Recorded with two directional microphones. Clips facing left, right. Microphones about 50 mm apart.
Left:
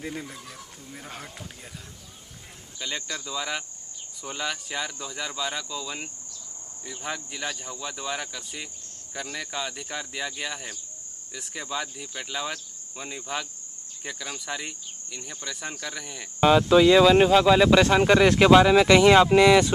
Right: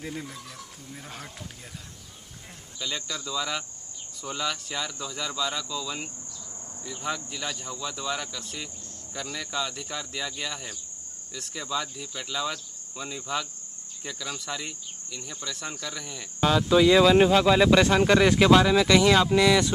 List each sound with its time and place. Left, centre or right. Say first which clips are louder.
0.0 s cricket: left 1 dB; centre
2.8 s cricket: even; centre
16.3 s speech: left 5 dB; left
16.7 s speech: even; centre
17.9 s cricket: left 2 dB; centre